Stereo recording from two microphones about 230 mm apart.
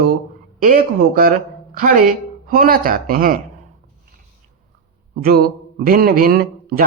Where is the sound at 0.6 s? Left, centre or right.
Right.